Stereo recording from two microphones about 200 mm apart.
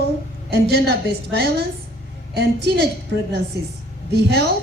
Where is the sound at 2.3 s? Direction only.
55° right (ahead or behind).